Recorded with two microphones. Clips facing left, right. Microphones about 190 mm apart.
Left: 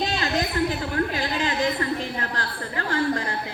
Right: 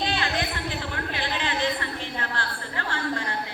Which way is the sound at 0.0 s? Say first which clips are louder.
Left 2 dB; 40° left (ahead or behind).